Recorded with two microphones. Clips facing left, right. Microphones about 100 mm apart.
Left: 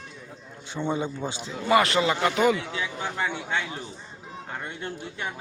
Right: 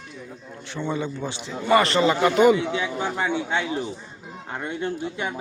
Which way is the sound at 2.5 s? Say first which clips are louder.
Right 6 dB; 25° right (ahead or behind).